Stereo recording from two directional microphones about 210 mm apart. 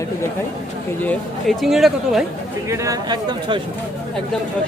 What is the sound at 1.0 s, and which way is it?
Speech, 5° left (ahead or behind).